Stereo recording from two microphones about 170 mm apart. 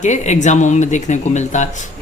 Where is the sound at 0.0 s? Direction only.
45° left (ahead or behind).